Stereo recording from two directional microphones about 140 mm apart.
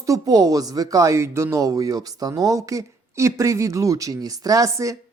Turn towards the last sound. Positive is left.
turn(degrees=-25)  # may be behind; listen again after turning